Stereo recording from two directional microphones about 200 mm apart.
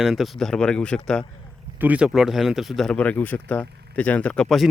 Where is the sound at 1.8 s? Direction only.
5° right (ahead or behind).